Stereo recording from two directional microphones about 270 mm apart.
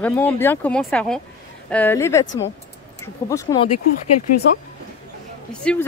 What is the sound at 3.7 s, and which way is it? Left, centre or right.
Speech, left.